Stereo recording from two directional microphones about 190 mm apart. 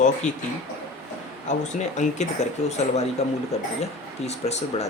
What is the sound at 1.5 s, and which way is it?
Speech, 40° left (ahead or behind).